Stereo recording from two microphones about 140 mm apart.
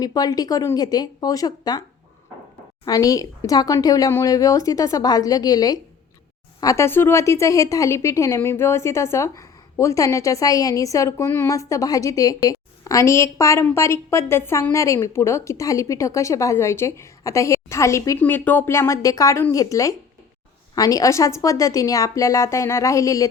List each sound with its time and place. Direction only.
0.0 s a woman's voice: 25° left (ahead or behind)
2.8 s a woman's voice: 25° left (ahead or behind)